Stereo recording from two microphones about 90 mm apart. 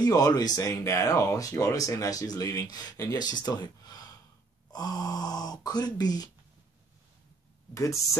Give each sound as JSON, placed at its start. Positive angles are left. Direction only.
{"t": 0.0, "sound": "speech", "side_deg": 45}
{"t": 7.7, "sound": "speech", "side_deg": 35}